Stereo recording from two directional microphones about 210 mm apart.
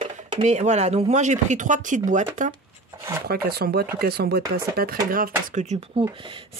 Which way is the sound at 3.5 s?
45° right (ahead or behind).